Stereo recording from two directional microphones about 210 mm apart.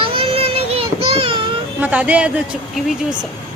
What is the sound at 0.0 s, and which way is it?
Child singing, 25° right (ahead or behind).